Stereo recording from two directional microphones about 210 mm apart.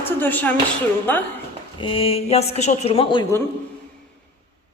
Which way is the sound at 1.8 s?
25° left (ahead or behind).